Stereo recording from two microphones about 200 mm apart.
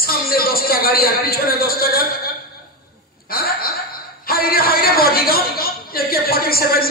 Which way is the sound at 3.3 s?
50° left (ahead or behind).